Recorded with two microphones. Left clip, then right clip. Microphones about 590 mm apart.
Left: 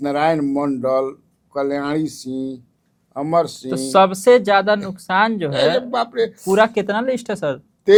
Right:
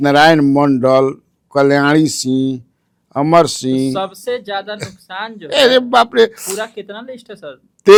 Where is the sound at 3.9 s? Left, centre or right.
Left.